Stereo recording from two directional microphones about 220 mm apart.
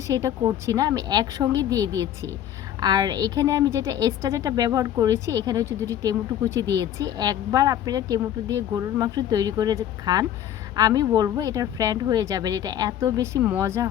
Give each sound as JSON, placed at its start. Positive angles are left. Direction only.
{"t": 0.1, "sound": "a woman's voice", "side_deg": -15}